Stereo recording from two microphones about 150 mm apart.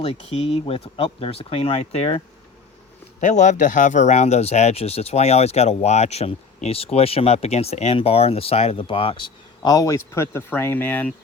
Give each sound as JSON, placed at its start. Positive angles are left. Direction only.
{"t": 0.0, "sound": "speech", "side_deg": 40}